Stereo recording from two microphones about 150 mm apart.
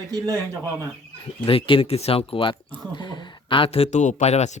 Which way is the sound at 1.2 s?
35° left (ahead or behind).